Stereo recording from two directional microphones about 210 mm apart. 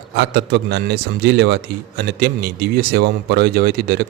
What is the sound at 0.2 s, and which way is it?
A man's voice, 55° right (ahead or behind).